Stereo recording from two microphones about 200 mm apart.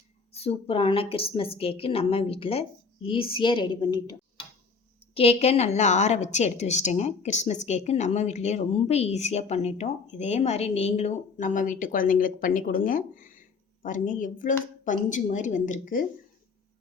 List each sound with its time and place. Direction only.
0.3 s a woman's voice: 30° left (ahead or behind)
5.1 s a woman's voice: 30° left (ahead or behind)